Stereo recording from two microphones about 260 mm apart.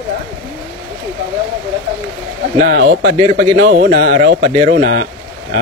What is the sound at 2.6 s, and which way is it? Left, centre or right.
Speech, right.